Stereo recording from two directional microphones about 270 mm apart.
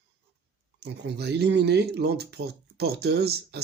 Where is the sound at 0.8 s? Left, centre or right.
Right.